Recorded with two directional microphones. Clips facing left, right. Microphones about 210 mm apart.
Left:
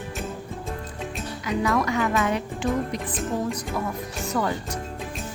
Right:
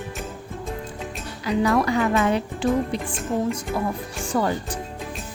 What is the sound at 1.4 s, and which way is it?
Speech, 30° right (ahead or behind).